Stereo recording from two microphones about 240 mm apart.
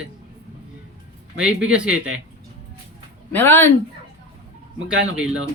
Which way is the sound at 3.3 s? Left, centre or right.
Centre.